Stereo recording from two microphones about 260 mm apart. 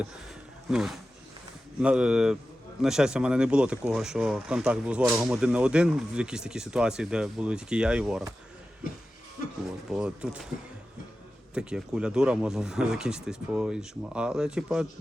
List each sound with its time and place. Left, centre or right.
0.7 s speech: centre
8.8 s music: left
9.9 s speech: centre
11.5 s speech: centre